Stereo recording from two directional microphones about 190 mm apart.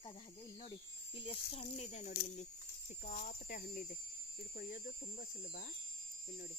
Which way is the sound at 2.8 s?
45° left (ahead or behind).